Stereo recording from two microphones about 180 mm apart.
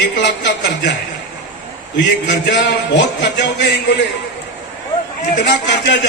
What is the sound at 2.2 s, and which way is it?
Speech, 80° left.